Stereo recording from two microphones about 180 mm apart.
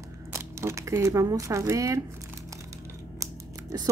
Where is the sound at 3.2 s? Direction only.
20° right (ahead or behind).